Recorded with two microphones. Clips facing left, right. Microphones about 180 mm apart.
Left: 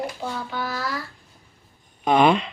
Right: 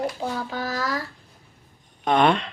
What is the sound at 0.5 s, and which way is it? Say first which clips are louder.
Child singing: right 1 dB; 40° right (ahead or behind).